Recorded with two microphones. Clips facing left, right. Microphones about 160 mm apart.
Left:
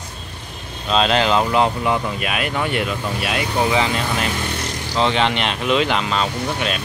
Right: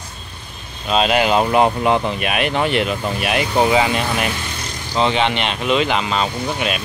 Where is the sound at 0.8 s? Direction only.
10° right (ahead or behind).